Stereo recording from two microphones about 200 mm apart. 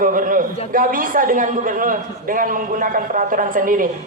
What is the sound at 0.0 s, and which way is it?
Speech, 45° right (ahead or behind).